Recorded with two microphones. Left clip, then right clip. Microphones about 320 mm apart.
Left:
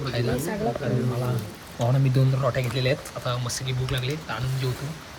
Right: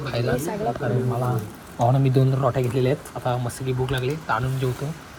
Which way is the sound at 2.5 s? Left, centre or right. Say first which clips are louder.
Right 3 dB; right.